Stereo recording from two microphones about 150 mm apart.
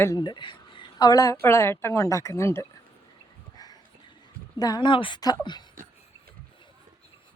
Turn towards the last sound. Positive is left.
turn(degrees=25)  # may be behind; listen again after turning